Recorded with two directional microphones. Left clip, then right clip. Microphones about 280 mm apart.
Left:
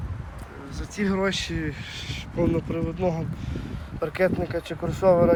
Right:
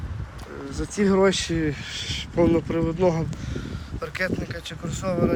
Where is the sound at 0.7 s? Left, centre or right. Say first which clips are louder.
Right 6 dB; centre.